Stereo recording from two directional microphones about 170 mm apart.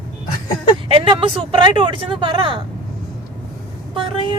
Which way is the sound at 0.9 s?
30° right (ahead or behind).